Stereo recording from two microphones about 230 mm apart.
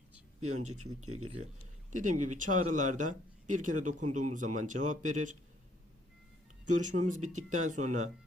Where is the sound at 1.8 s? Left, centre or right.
Right.